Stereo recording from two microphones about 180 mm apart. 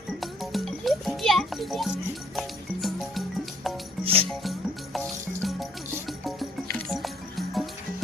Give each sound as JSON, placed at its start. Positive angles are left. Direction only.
{"t": 0.2, "sound": "music", "side_deg": 0}
{"t": 4.0, "sound": "music", "side_deg": -30}
{"t": 4.9, "sound": "music", "side_deg": 0}